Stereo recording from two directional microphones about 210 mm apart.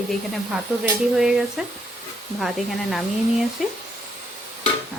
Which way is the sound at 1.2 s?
5° right (ahead or behind).